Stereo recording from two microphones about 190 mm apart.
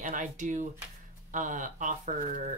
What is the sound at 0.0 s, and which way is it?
Speech, 45° right (ahead or behind).